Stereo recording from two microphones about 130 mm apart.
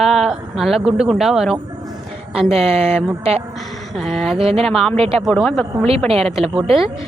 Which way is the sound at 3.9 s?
Centre (ahead or behind).